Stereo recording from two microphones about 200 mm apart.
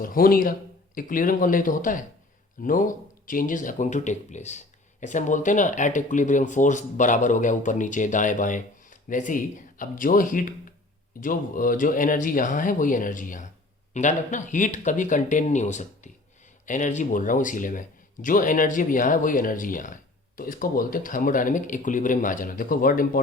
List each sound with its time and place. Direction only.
0.0 s speech: 45° left (ahead or behind)